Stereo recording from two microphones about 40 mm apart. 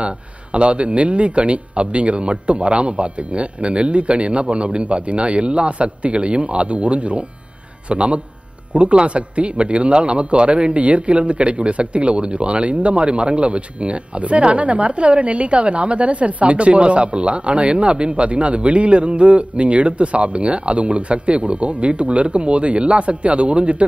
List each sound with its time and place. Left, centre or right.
0.0 s a man's voice: right